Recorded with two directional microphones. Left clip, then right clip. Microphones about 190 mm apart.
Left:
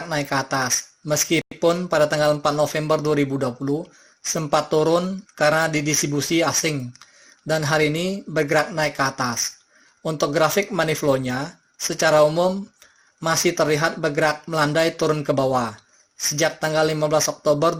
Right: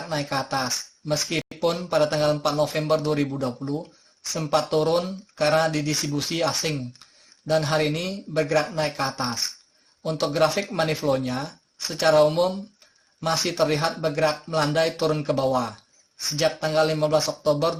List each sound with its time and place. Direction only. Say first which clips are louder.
0.1 s speech: left 3 dB; 25° left (ahead or behind)